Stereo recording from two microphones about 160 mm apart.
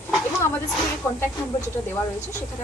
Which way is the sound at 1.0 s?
15° left (ahead or behind).